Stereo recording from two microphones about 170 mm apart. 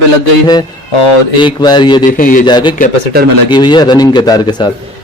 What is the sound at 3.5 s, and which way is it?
Speech, 25° left (ahead or behind).